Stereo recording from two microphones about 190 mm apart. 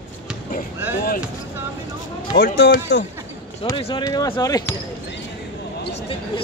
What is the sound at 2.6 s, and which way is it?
Speech, 70° left (ahead or behind).